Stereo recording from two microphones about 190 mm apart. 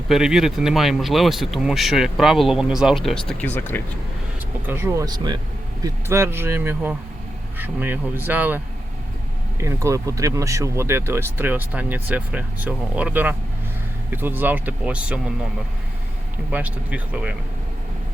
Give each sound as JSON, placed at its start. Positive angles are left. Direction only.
{"t": 0.1, "sound": "speech", "side_deg": -5}
{"t": 4.6, "sound": "speech", "side_deg": -15}
{"t": 16.5, "sound": "speech", "side_deg": -10}